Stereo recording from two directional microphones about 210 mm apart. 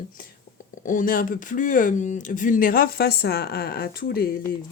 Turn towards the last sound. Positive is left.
turn(degrees=45)  # may be behind; listen again after turning